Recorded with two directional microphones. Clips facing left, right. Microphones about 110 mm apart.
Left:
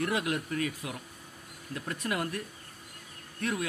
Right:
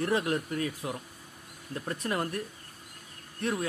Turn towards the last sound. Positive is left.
turn(degrees=-30)  # may be behind; listen again after turning